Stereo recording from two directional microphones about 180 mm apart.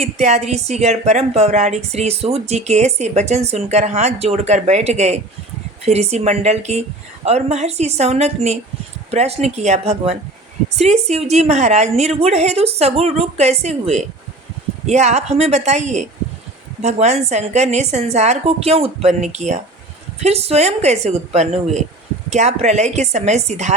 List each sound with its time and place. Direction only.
0.0 s a woman's voice: 40° right (ahead or behind)